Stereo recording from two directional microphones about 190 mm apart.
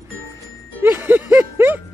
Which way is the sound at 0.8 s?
10° right (ahead or behind).